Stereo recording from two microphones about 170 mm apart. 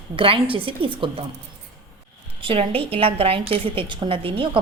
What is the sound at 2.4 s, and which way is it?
A woman's voice, 35° right (ahead or behind).